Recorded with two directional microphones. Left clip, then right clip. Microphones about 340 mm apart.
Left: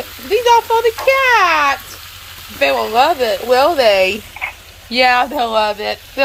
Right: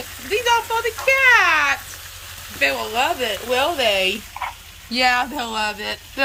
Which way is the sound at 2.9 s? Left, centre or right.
Centre.